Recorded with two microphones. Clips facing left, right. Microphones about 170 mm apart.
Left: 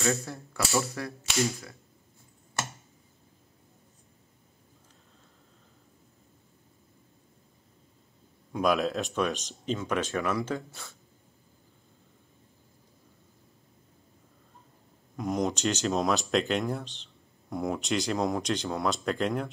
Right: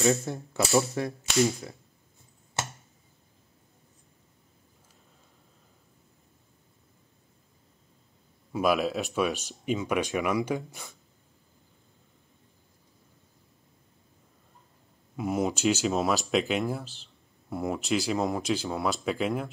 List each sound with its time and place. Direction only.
0.0 s speech: 20° right (ahead or behind)
8.5 s speech: 5° right (ahead or behind)
15.1 s speech: 5° right (ahead or behind)